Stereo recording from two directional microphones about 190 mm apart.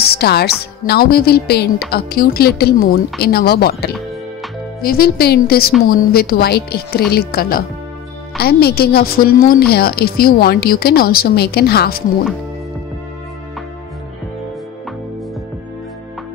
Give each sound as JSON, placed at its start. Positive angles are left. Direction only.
{"t": 0.0, "sound": "a woman's voice", "side_deg": 55}